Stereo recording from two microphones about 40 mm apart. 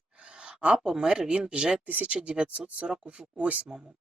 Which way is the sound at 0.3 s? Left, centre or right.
Right.